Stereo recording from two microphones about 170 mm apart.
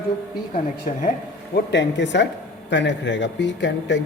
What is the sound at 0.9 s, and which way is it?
Speech, 55° left (ahead or behind).